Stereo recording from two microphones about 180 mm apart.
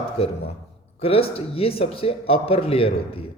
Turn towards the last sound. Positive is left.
turn(degrees=30)  # may be behind; listen again after turning